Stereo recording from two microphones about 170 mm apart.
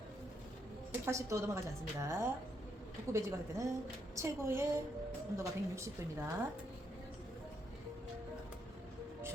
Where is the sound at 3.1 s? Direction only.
15° right (ahead or behind).